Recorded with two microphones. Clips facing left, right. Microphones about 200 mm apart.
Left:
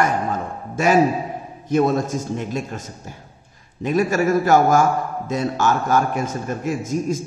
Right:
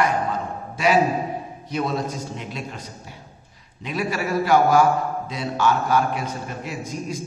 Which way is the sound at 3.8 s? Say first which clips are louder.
Left 7 dB; 45° left (ahead or behind).